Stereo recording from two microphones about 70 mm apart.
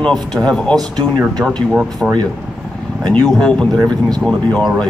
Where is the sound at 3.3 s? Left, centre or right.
Centre.